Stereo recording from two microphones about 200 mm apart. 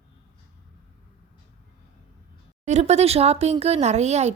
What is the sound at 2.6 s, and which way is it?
Speech, 35° right (ahead or behind).